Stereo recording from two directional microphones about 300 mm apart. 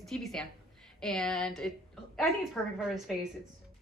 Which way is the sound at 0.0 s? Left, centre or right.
Centre.